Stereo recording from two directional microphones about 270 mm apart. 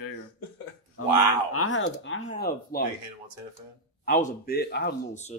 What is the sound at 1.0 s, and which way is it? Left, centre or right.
Speech, left.